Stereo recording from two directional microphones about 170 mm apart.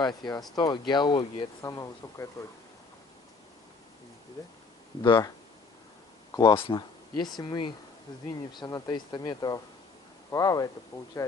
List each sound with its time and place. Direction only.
0.0 s speech: 25° left (ahead or behind)
5.0 s speech: 30° left (ahead or behind)
6.3 s speech: 25° left (ahead or behind)